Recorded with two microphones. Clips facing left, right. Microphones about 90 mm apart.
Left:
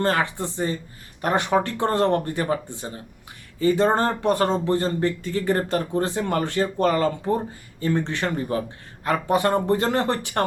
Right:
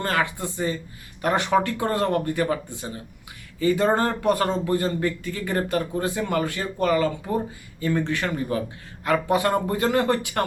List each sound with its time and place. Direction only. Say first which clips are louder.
0.0 s speech: left 2 dB; 30° left (ahead or behind)
1.8 s a man's voice: left 2 dB; 30° left (ahead or behind)
3.6 s a man's voice: left 1 dB; 30° left (ahead or behind)
7.8 s speech: even; 25° left (ahead or behind)